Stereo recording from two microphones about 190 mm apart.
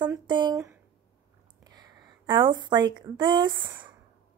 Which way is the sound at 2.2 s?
25° right (ahead or behind).